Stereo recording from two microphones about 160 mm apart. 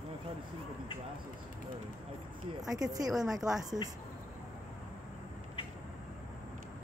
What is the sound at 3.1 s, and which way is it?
Speech, 5° right (ahead or behind).